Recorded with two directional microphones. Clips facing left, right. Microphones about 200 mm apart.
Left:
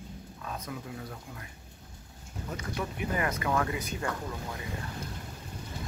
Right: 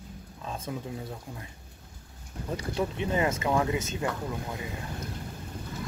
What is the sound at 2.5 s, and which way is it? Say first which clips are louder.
Speech: right 6 dB; 25° right (ahead or behind).